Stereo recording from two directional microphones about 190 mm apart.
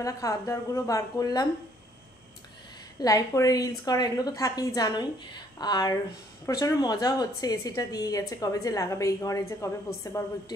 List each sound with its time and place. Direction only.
0.0 s a woman's voice: 15° left (ahead or behind)
3.0 s a woman's voice: 20° left (ahead or behind)